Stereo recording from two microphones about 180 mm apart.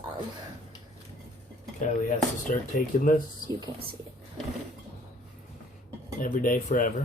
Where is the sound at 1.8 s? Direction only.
45° left (ahead or behind).